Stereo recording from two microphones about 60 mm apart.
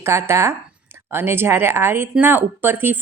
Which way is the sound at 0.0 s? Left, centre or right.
Right.